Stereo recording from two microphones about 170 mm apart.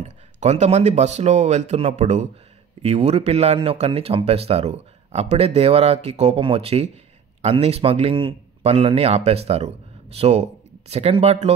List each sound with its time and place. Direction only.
0.0 s speech: 40° right (ahead or behind)